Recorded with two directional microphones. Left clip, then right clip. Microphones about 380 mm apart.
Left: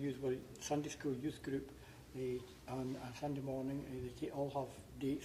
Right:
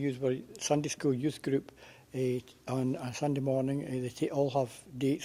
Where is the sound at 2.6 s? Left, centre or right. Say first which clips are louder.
Right 12 dB; right.